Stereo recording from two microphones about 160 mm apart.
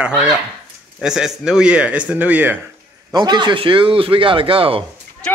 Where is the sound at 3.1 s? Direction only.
25° right (ahead or behind).